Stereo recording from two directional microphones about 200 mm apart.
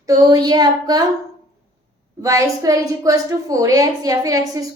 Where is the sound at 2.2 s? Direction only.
15° right (ahead or behind).